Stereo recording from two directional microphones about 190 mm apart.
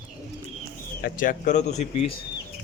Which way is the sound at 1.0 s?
45° left (ahead or behind).